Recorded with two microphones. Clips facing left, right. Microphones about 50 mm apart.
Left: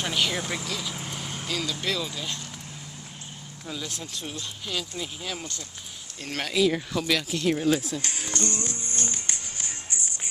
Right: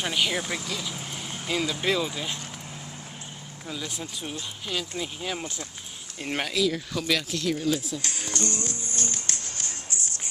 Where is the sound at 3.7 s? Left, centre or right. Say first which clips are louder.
Right 1 dB; centre.